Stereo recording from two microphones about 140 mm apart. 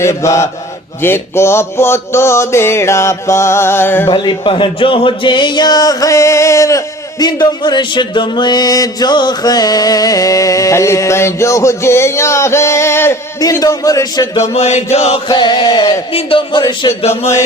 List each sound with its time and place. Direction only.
0.0 s speech: 20° left (ahead or behind)
4.1 s speech: 35° left (ahead or behind)
14.5 s chant: 50° left (ahead or behind)
15.3 s a man's voice: 35° left (ahead or behind)